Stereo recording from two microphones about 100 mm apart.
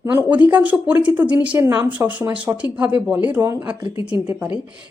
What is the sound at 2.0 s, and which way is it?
Speech, 15° right (ahead or behind).